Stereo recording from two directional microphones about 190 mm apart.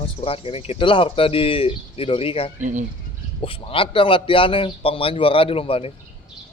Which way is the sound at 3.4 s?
30° left (ahead or behind).